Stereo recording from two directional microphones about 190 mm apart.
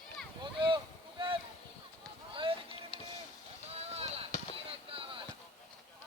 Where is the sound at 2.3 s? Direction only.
30° right (ahead or behind).